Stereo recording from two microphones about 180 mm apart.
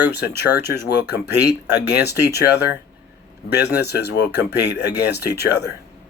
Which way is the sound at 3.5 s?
65° left (ahead or behind).